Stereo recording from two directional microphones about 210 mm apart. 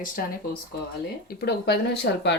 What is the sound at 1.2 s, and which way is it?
Speech, 50° left (ahead or behind).